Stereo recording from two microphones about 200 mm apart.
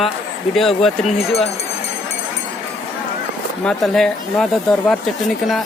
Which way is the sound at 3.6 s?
Centre (ahead or behind).